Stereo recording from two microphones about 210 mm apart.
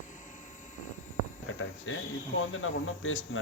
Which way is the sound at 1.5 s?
70° left (ahead or behind).